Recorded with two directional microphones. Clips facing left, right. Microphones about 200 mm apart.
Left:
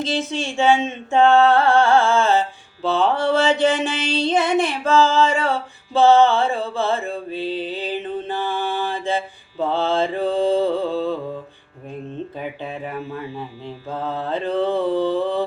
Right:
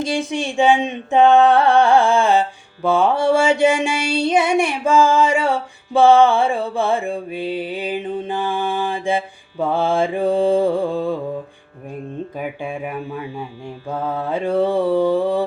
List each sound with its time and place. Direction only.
0.0 s mantra: 15° right (ahead or behind)
12.4 s mantra: 10° right (ahead or behind)